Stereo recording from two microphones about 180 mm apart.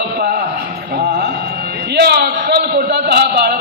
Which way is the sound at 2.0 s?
70° right (ahead or behind).